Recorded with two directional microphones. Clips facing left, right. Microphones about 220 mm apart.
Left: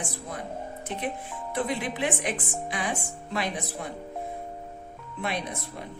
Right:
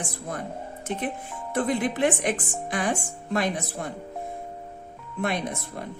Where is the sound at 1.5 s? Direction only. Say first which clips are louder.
Right 5 dB; 50° right (ahead or behind).